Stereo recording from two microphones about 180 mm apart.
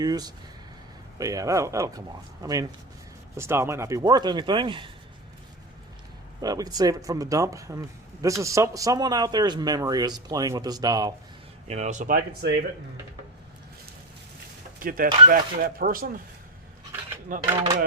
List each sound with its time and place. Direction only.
0.0 s speech: 20° right (ahead or behind)
6.4 s speech: 20° right (ahead or behind)
11.7 s speech: 40° right (ahead or behind); by 12.5 s 60° right (ahead or behind)
14.8 s speech: 50° right (ahead or behind)
17.3 s speech: 45° right (ahead or behind)